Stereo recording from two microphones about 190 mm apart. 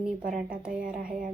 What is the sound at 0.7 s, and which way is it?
Speech, 45° right (ahead or behind).